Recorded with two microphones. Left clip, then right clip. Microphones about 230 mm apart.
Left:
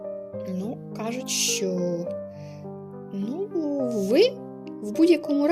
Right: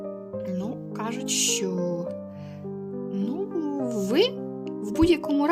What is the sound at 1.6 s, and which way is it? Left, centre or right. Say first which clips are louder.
Speech: left 2 dB; right.